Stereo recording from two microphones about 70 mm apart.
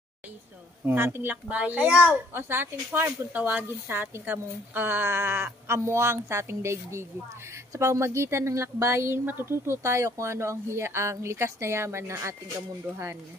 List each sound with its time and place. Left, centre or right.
0.8 s a woman's voice: right
1.3 s a woman's voice: right
2.3 s speech: right